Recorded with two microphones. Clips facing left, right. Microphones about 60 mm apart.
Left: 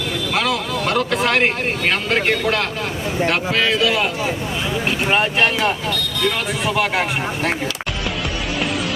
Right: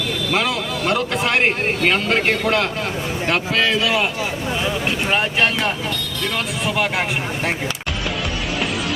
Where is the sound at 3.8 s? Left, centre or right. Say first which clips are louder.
Left 1 dB; centre.